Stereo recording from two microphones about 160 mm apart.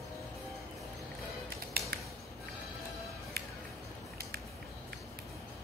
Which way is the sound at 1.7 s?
75° right (ahead or behind).